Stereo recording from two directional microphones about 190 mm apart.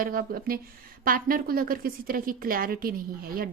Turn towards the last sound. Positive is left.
turn(degrees=-50)  # may be behind; listen again after turning